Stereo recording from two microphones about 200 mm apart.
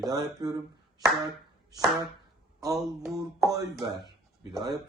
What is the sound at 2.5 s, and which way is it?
Chopping, 15° right (ahead or behind).